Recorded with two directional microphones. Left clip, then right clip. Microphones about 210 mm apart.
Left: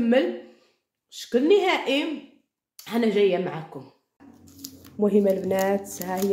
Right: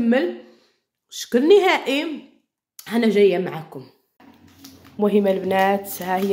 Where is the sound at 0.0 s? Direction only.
15° right (ahead or behind).